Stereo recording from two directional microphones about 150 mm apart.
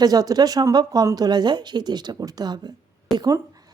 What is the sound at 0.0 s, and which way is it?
A woman's voice, 25° right (ahead or behind).